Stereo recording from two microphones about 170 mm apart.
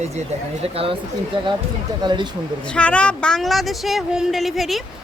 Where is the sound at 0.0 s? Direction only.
40° right (ahead or behind).